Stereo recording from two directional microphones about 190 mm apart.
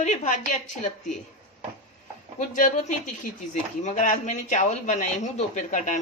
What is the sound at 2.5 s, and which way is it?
Speech, 40° left (ahead or behind).